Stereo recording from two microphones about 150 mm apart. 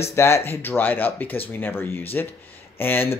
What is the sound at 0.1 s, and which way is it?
Speech, 15° left (ahead or behind).